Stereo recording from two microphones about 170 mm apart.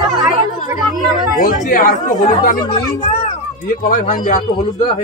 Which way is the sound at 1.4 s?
55° left (ahead or behind).